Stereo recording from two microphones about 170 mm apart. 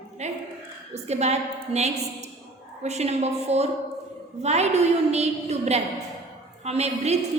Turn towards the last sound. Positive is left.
turn(degrees=-40)  # may be behind; listen again after turning